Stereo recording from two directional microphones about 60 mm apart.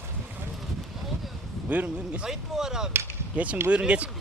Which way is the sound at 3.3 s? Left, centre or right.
Right.